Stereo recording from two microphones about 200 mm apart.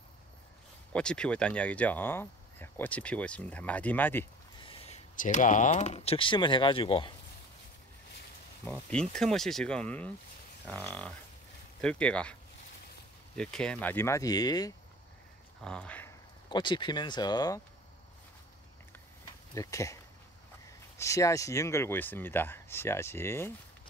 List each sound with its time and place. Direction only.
0.9 s speech: 5° left (ahead or behind)
4.6 s speech: 35° left (ahead or behind)
8.6 s speech: 5° left (ahead or behind)
13.4 s speech: 5° left (ahead or behind)
15.6 s speech: 5° left (ahead or behind)
16.4 s speech: 25° left (ahead or behind)
19.5 s speech: 15° left (ahead or behind)
21.0 s speech: 15° left (ahead or behind)